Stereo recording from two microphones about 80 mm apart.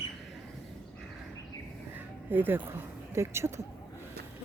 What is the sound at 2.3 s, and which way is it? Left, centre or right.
Speech, right.